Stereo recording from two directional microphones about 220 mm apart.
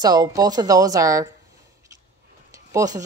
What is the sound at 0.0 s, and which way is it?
A woman's voice, 15° right (ahead or behind).